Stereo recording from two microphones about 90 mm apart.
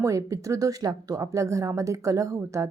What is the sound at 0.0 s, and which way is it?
Speech, 35° right (ahead or behind).